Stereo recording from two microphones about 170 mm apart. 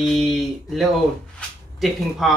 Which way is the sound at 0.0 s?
Centre (ahead or behind).